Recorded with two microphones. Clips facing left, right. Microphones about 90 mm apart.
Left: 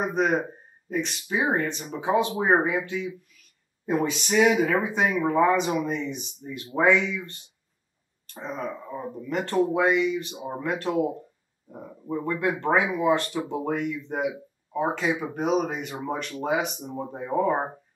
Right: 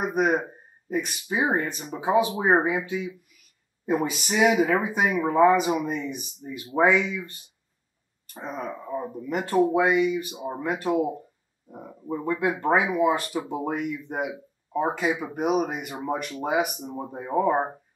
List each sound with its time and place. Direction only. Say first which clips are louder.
0.1 s speech: right 1 dB; 10° right (ahead or behind)
8.5 s speech: right 3 dB; 10° right (ahead or behind)
17.3 s speech: right 1 dB; 15° right (ahead or behind)